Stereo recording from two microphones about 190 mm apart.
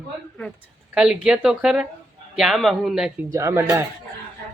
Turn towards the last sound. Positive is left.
turn(degrees=-10)  # may be behind; listen again after turning